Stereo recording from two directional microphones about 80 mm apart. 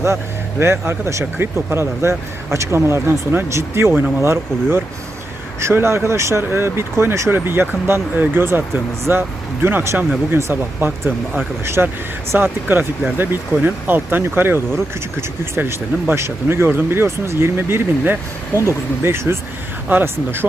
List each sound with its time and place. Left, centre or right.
0.6 s speech: right